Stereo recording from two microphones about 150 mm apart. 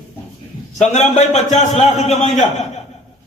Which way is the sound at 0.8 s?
50° left (ahead or behind).